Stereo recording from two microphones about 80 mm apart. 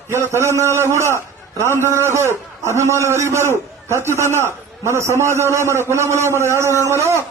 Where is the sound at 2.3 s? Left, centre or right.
Left.